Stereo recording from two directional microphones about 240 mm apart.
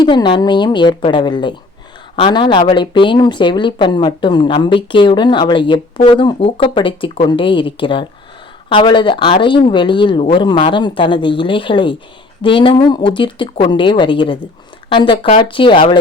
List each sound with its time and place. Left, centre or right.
0.0 s speech: centre